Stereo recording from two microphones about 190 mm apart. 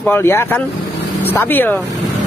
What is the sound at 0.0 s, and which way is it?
Speech, 10° left (ahead or behind).